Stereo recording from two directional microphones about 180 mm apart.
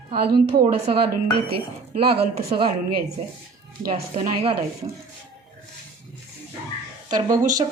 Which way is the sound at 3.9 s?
30° right (ahead or behind).